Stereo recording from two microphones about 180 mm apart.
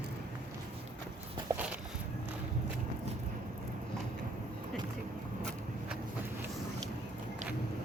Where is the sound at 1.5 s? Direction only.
15° right (ahead or behind).